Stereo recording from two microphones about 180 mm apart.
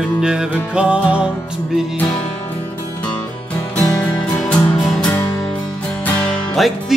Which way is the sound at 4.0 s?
5° left (ahead or behind).